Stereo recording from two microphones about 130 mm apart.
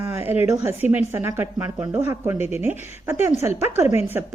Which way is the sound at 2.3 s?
55° left (ahead or behind).